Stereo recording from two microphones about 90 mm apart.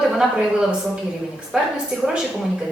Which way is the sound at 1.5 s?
5° right (ahead or behind).